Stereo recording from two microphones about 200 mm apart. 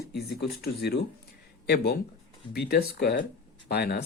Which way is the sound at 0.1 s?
55° left (ahead or behind).